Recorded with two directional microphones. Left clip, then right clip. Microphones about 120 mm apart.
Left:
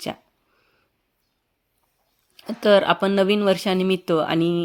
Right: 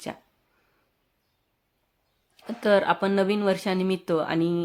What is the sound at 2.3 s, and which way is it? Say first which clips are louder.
Speech: left 5 dB; 40° left (ahead or behind).